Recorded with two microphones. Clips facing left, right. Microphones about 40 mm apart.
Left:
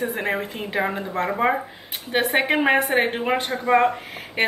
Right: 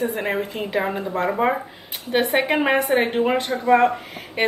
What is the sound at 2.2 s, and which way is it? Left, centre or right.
Speech, left.